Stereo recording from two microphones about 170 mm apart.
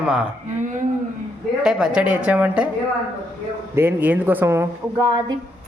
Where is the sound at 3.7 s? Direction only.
10° right (ahead or behind).